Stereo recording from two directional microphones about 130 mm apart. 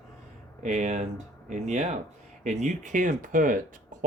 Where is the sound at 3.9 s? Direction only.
80° right.